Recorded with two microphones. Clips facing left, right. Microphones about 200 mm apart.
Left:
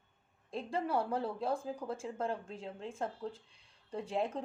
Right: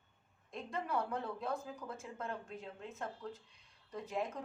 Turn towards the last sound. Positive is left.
turn(degrees=30)  # may be behind; listen again after turning